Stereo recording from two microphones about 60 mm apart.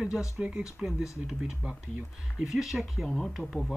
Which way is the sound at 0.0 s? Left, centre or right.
Centre.